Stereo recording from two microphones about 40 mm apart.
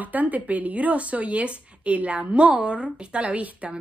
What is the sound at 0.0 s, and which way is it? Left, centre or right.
A woman's voice, right.